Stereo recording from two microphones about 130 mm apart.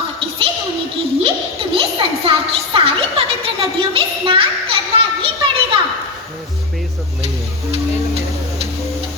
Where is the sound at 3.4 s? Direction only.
45° right (ahead or behind).